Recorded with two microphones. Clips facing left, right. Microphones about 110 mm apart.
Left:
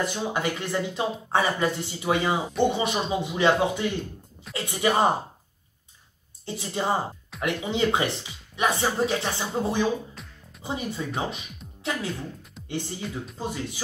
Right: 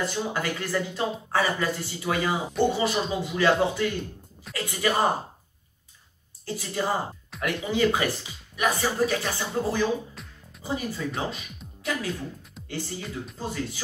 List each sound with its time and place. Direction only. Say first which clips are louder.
0.0 s speech: left 1 dB; 20° left (ahead or behind)
6.4 s speech: left 1 dB; 20° left (ahead or behind)
10.2 s music: even; centre (ahead or behind)
10.6 s speech: right 1 dB; 20° left (ahead or behind)